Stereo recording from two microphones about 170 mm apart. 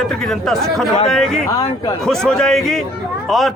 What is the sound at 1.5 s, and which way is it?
Speech, 20° left (ahead or behind).